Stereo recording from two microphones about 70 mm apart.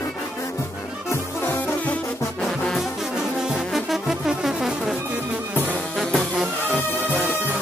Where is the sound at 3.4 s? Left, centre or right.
Centre.